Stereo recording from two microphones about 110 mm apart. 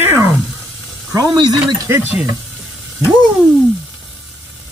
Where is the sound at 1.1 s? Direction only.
40° right (ahead or behind).